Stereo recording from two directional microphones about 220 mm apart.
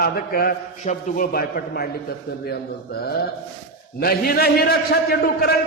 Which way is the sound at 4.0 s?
45° left (ahead or behind).